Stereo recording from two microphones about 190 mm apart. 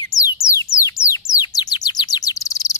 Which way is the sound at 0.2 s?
15° left (ahead or behind).